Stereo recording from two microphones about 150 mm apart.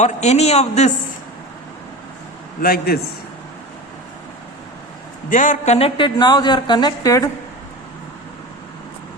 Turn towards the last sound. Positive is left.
turn(degrees=25)  # may be behind; listen again after turning